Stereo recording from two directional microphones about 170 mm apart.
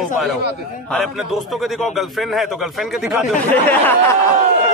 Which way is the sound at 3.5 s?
10° left (ahead or behind).